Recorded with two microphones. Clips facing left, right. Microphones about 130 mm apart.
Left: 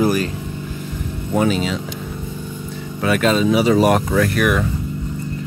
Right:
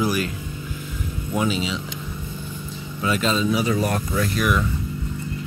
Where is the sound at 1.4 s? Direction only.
50° left (ahead or behind).